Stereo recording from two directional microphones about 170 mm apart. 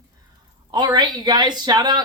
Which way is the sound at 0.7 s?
25° right (ahead or behind).